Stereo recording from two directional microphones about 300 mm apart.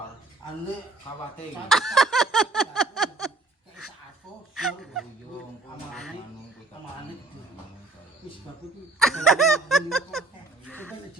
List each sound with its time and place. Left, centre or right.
1.7 s a sound: centre
4.5 s fowl: centre
9.0 s laughter: centre
10.7 s music: centre